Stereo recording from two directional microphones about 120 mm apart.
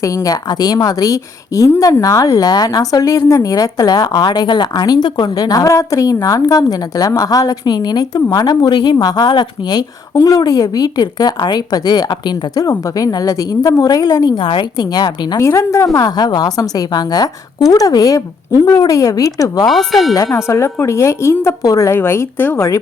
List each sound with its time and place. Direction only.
0.0 s a woman's voice: 30° left (ahead or behind)
15.4 s a woman's voice: 25° left (ahead or behind)
19.6 s speech: centre (ahead or behind)
20.3 s a woman's voice: 25° left (ahead or behind)